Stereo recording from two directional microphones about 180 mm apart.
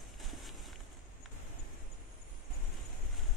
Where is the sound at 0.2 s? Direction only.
Centre (ahead or behind).